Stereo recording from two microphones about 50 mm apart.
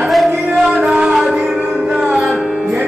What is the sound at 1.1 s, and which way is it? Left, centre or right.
Music, centre.